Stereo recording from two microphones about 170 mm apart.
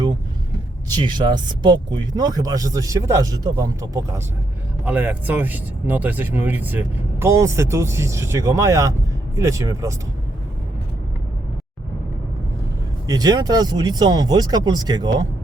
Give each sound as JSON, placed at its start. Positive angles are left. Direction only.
{"t": 1.0, "sound": "speech", "side_deg": -25}
{"t": 13.1, "sound": "speech", "side_deg": -20}